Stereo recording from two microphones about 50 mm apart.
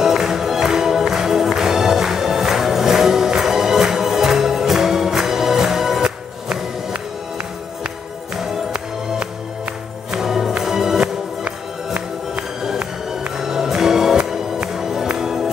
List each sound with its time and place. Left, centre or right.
0.0 s music: centre
10.2 s music: centre
11.4 s music: right
13.1 s music: centre